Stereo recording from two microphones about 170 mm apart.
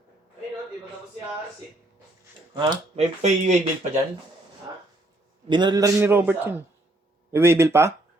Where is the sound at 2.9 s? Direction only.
40° right (ahead or behind).